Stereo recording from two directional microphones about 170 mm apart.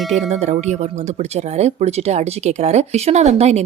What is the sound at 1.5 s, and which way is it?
Speech, 40° right (ahead or behind).